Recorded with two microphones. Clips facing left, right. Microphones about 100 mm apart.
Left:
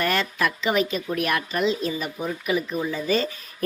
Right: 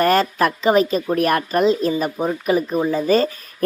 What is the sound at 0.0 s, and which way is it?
Speech, 40° right (ahead or behind).